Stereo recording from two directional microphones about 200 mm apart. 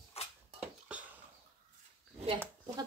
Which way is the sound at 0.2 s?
30° left (ahead or behind).